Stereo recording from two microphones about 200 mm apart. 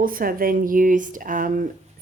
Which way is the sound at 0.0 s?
45° right (ahead or behind).